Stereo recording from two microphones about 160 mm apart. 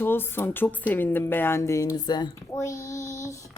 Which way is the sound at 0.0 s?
15° left (ahead or behind).